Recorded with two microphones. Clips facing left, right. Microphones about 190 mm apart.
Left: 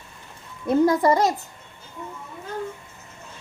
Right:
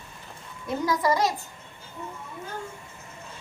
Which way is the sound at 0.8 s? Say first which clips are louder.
Left 2 dB; 55° left (ahead or behind).